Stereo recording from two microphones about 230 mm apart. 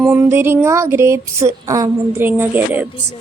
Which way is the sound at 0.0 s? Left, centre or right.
Centre.